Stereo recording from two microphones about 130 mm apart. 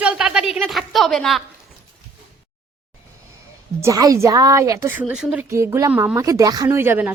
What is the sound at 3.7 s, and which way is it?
A woman's voice, 25° right (ahead or behind).